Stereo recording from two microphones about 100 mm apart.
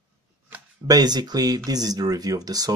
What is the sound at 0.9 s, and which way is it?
Speech, 45° right (ahead or behind).